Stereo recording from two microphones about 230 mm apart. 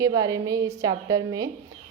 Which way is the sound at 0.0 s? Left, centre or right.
Centre.